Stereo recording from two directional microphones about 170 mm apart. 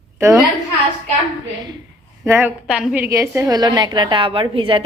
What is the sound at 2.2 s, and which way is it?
Speech, 15° right (ahead or behind).